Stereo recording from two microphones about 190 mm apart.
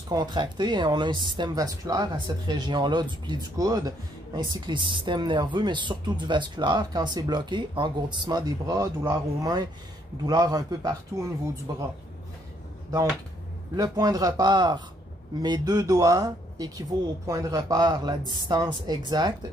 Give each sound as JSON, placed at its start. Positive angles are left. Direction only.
{"t": 0.1, "sound": "a man's voice", "side_deg": -20}
{"t": 13.7, "sound": "speech", "side_deg": -20}